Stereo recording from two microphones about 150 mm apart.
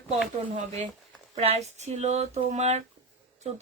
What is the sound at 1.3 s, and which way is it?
Speech, 45° right (ahead or behind).